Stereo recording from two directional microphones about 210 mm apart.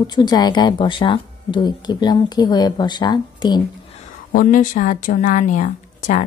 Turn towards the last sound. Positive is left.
turn(degrees=35)  # may be behind; listen again after turning